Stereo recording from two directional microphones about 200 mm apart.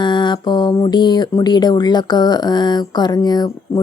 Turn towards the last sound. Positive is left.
turn(degrees=20)  # may be behind; listen again after turning